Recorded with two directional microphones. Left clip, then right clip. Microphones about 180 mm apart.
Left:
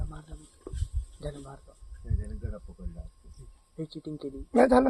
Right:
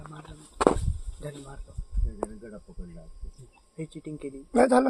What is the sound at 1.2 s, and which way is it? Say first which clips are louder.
Speech: left 1 dB; 20° right (ahead or behind).